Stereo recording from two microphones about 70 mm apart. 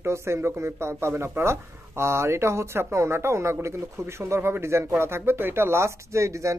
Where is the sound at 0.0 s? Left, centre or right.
Right.